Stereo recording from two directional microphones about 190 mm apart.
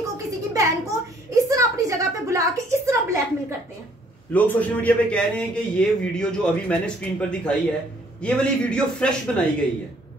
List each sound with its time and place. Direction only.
0.0 s a sound: 15° right (ahead or behind)
1.5 s a woman's voice: 15° right (ahead or behind)
4.3 s a man's voice: 10° left (ahead or behind)